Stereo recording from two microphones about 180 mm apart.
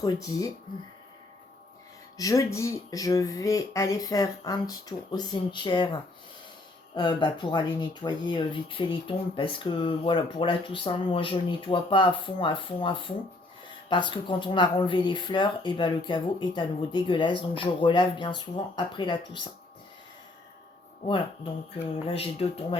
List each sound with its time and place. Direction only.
0.0 s speech: 20° left (ahead or behind)
2.1 s speech: 20° left (ahead or behind)
22.0 s speech: 35° left (ahead or behind)